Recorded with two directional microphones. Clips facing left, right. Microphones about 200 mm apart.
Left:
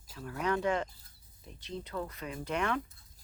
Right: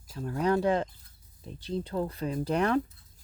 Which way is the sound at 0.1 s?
35° right (ahead or behind).